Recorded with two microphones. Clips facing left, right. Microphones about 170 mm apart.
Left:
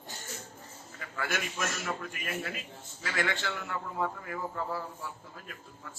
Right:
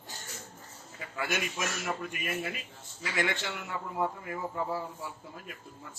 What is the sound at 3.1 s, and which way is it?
A man's voice, 20° right (ahead or behind).